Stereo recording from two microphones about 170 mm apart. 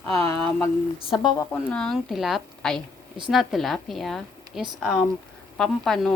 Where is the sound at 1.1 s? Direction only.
25° left (ahead or behind).